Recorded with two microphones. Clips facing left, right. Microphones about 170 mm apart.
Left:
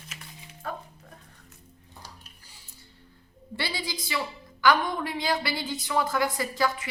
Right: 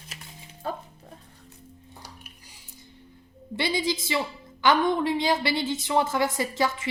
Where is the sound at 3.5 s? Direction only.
20° right (ahead or behind).